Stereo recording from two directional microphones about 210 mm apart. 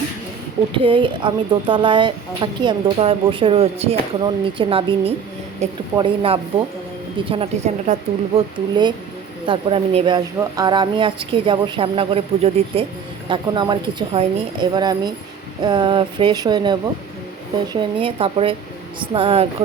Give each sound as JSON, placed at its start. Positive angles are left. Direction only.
{"t": 0.7, "sound": "speech", "side_deg": -25}